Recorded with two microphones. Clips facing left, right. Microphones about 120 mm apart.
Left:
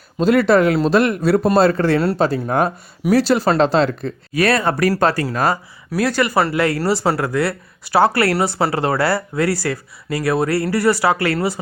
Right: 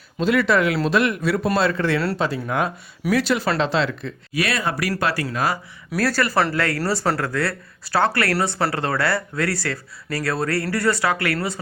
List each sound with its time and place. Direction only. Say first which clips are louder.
0.2 s speech: left 5 dB; 40° left (ahead or behind)
6.0 s speech: left 3 dB; 15° left (ahead or behind)